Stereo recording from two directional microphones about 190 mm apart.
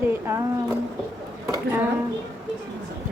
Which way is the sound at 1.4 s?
15° right (ahead or behind).